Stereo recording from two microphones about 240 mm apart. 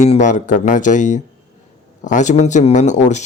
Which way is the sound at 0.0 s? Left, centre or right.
Left.